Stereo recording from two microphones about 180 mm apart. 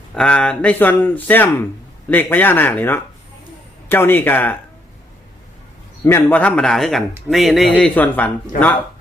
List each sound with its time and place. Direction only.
0.1 s speech: 5° left (ahead or behind)
6.1 s speech: 10° left (ahead or behind)